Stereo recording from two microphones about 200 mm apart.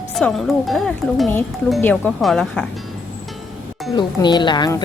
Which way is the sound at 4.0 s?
20° left (ahead or behind).